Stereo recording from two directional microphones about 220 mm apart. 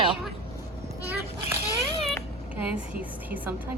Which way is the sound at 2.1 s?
5° right (ahead or behind).